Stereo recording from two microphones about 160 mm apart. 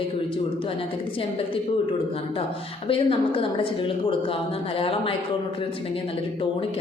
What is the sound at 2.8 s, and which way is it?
A woman's voice, 35° left (ahead or behind).